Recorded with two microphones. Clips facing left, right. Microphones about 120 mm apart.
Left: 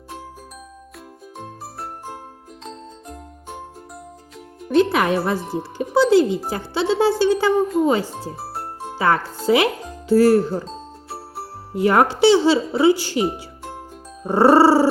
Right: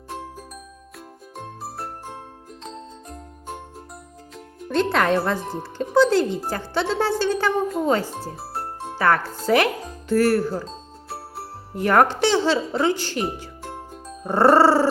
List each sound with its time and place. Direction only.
1.4 s jingle: centre (ahead or behind)
4.4 s speech: 10° left (ahead or behind)
8.4 s music: centre (ahead or behind)
9.0 s speech: 15° left (ahead or behind)
10.5 s music: centre (ahead or behind)
11.8 s speech: 15° left (ahead or behind)
13.7 s music: centre (ahead or behind)
14.3 s speech: 15° left (ahead or behind)